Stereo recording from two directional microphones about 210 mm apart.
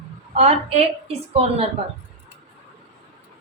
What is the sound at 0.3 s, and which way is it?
A woman's voice, 30° right (ahead or behind).